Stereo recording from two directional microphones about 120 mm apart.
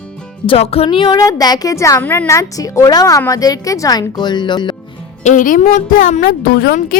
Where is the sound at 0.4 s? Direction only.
55° left (ahead or behind).